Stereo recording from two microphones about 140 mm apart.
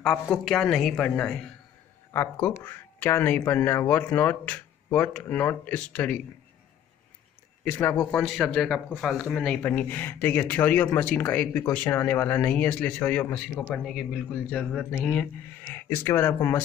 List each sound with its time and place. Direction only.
0.0 s a woman's voice: 5° left (ahead or behind)
2.6 s speech: 15° left (ahead or behind)
7.6 s a woman's voice: 10° left (ahead or behind)